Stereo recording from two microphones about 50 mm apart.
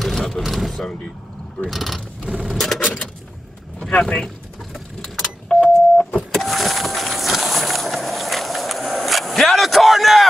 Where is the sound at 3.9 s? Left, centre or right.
Left.